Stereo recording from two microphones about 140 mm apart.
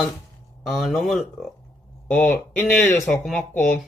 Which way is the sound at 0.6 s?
Centre (ahead or behind).